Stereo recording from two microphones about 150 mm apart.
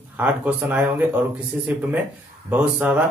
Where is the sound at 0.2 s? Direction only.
10° right (ahead or behind).